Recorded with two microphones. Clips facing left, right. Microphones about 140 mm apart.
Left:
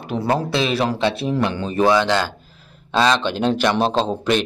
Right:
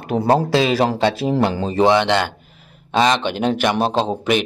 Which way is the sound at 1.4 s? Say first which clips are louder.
Right 2 dB; 30° right (ahead or behind).